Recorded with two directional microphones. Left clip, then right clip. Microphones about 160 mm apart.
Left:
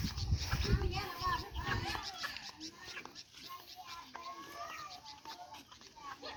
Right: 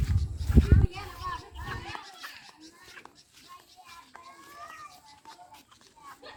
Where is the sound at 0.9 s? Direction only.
30° left (ahead or behind).